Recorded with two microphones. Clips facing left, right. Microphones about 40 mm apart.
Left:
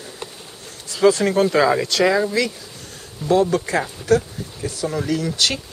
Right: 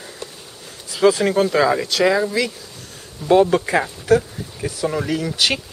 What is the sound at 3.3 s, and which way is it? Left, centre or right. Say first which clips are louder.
Speech: right 3 dB; right.